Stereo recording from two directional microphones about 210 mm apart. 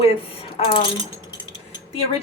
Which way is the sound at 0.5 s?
25° left (ahead or behind).